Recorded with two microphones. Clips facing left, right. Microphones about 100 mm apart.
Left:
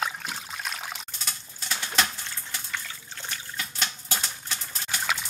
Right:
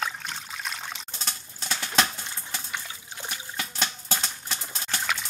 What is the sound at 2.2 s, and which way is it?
Water, 20° right (ahead or behind).